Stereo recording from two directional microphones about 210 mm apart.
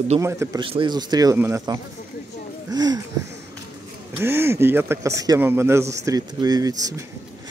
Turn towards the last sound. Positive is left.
turn(degrees=-15)  # may be behind; listen again after turning